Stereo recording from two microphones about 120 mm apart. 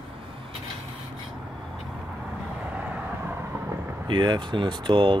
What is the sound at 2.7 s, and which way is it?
Vehicle, 15° right (ahead or behind).